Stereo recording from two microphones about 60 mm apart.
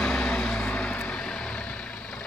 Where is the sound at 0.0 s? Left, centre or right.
Centre.